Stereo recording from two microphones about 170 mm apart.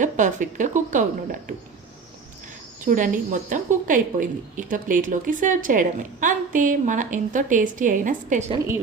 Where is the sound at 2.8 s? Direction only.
50° right (ahead or behind).